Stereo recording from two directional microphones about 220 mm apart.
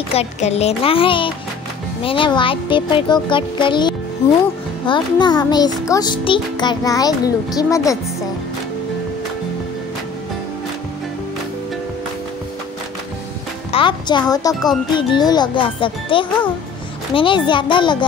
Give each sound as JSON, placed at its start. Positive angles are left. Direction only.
{"t": 0.1, "sound": "speech", "side_deg": 30}
{"t": 4.8, "sound": "music", "side_deg": 20}
{"t": 13.7, "sound": "speech", "side_deg": 25}
{"t": 14.5, "sound": "speech", "side_deg": 0}
{"t": 15.0, "sound": "speech", "side_deg": 20}